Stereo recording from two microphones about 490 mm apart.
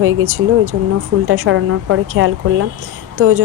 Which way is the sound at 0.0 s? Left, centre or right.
Right.